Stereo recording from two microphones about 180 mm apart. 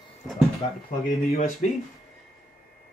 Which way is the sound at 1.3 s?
40° left (ahead or behind).